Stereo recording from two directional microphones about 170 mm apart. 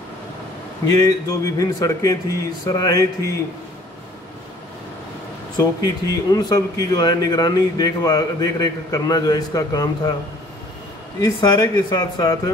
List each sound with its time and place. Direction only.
0.8 s speech: 20° left (ahead or behind)
5.6 s speech: 20° left (ahead or behind)
11.1 s speech: 20° left (ahead or behind)